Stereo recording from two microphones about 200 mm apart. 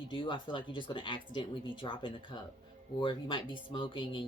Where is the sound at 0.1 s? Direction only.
25° left (ahead or behind).